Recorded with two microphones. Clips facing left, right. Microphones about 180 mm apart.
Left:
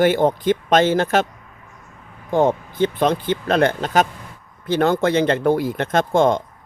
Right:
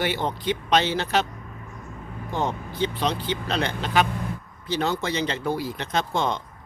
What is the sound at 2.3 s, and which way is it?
Speech, 50° left (ahead or behind).